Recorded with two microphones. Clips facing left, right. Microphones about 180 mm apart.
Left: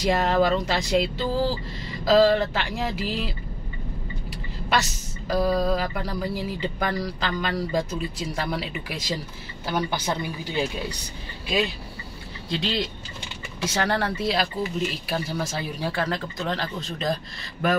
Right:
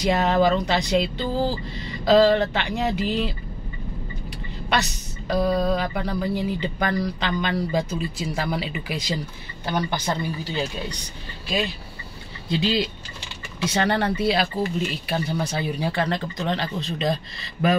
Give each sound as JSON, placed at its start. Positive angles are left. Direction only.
{"t": 0.0, "sound": "music", "side_deg": 0}
{"t": 4.6, "sound": "music", "side_deg": 0}
{"t": 9.7, "sound": "speech", "side_deg": 5}
{"t": 12.4, "sound": "music", "side_deg": -5}